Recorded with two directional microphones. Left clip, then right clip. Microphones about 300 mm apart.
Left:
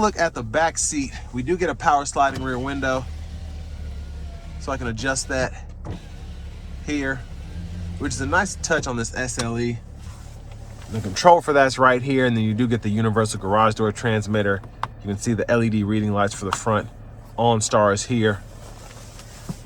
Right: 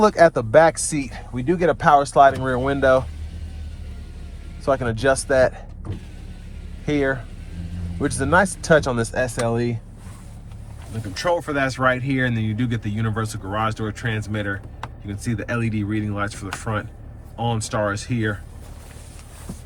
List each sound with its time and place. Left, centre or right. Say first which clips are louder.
0.0 s speech: right 6 dB; centre
4.6 s speech: right 6 dB; centre
6.8 s speech: right 4 dB; centre
11.1 s speech: left 8 dB; centre